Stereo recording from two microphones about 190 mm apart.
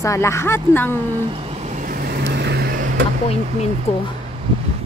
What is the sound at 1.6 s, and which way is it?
Vehicle, 45° right (ahead or behind).